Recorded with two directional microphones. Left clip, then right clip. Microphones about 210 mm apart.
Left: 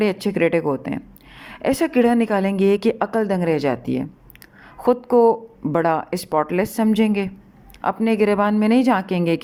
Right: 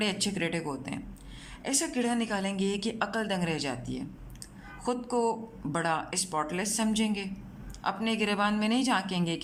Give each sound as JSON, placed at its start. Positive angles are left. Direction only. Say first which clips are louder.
{"t": 0.0, "sound": "a woman's voice", "louder": "left 11 dB", "side_deg": 30}